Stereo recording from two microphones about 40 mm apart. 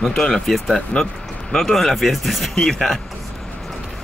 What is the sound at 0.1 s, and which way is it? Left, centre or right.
Speech, centre.